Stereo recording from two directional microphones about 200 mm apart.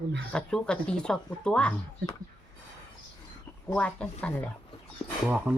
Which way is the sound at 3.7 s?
5° left (ahead or behind).